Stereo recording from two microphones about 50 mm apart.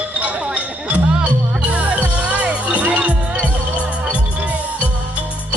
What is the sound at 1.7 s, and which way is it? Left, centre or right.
Music, right.